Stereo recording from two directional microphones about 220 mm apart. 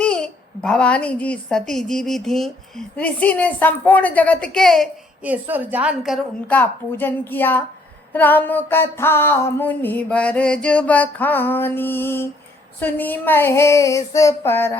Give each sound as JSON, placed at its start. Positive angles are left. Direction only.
{"t": 0.0, "sound": "a child's voice", "side_deg": 5}
{"t": 8.1, "sound": "music", "side_deg": 10}